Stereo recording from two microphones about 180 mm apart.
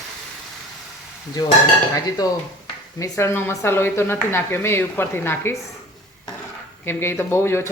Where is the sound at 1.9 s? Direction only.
20° left (ahead or behind).